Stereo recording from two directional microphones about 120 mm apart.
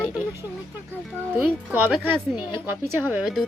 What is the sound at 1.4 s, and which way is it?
A woman's voice, 15° right (ahead or behind).